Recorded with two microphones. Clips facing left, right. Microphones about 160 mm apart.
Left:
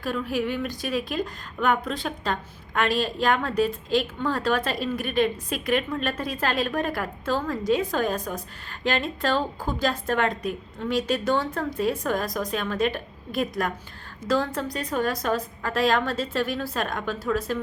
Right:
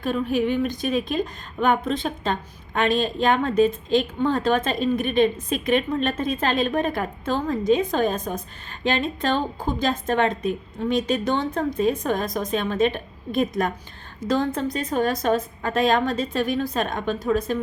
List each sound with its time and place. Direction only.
0.0 s speech: 20° right (ahead or behind)